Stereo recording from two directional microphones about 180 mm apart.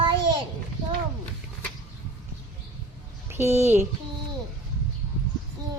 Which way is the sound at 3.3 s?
15° right (ahead or behind).